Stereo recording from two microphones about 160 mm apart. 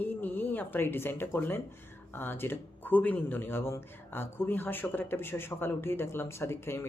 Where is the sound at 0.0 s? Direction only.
10° left (ahead or behind).